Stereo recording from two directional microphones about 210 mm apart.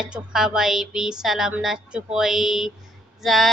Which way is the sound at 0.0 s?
5° right (ahead or behind).